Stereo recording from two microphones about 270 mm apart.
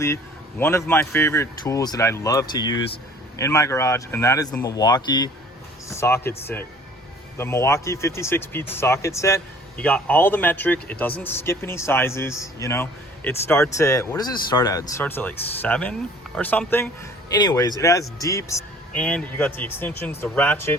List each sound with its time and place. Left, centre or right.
0.6 s speech: centre